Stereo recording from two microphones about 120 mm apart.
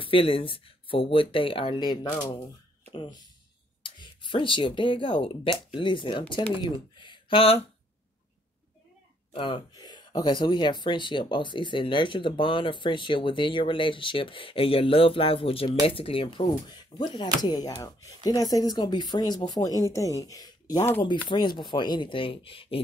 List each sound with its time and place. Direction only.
0.0 s speech: 50° left (ahead or behind)
9.3 s speech: 45° left (ahead or behind)